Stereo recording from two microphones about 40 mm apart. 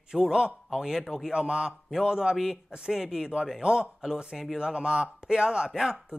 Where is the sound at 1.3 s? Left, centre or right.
Centre.